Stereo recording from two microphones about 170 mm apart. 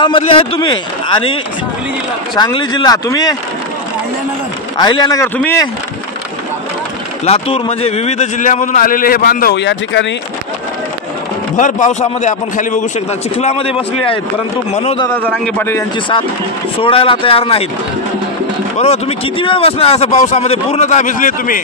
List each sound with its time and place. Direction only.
0.0 s a man's voice: 30° left (ahead or behind)
4.7 s a man's voice: 25° left (ahead or behind)
7.2 s a man's voice: 35° left (ahead or behind); by 10.0 s 90° left
11.5 s a man's voice: 45° left (ahead or behind)
15.0 s a man's voice: 5° left (ahead or behind)
16.8 s speech: 30° left (ahead or behind)
18.8 s speech: 35° left (ahead or behind)